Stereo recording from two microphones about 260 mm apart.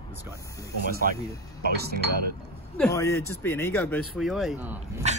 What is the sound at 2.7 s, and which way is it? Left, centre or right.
Speech, centre.